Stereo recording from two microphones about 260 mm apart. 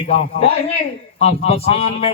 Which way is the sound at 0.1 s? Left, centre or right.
Left.